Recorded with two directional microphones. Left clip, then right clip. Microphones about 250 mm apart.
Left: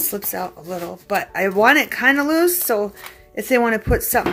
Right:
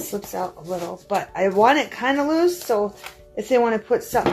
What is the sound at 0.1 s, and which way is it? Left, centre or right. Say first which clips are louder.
Speech: right 1 dB; left.